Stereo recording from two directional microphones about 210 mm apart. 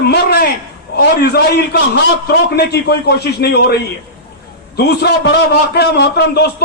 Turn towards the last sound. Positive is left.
turn(degrees=50)  # may be behind; listen again after turning